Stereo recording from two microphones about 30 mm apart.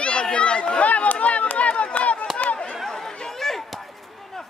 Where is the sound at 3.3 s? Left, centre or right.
Centre.